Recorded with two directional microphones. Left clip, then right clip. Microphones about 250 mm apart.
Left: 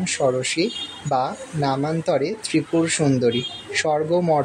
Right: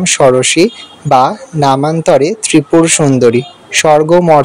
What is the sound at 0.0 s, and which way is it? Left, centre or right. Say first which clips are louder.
Speech: right 13 dB; right.